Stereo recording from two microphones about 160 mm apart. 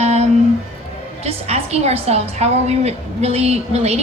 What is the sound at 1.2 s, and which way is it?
A woman's voice, 40° right (ahead or behind).